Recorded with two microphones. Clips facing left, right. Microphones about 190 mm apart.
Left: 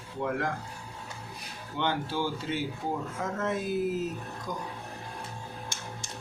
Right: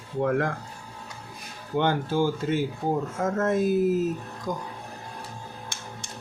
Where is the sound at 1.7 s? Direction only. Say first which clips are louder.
Right 6 dB; 50° right (ahead or behind).